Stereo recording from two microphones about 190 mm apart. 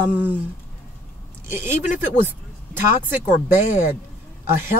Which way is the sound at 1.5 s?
10° right (ahead or behind).